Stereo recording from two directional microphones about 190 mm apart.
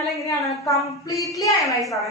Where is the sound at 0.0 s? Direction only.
15° left (ahead or behind).